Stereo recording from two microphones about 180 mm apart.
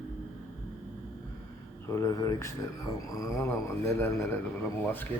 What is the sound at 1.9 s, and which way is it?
Speech, 15° left (ahead or behind).